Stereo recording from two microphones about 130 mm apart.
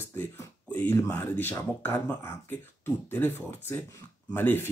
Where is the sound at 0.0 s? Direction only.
20° left (ahead or behind).